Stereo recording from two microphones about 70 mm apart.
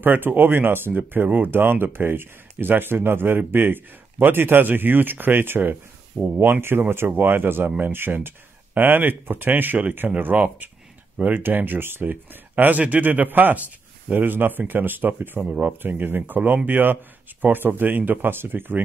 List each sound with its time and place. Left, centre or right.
0.0 s speech: right